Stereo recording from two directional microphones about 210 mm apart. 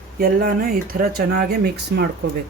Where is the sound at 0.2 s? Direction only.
45° right (ahead or behind).